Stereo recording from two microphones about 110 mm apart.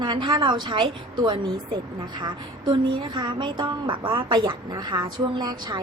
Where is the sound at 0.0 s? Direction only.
45° right (ahead or behind).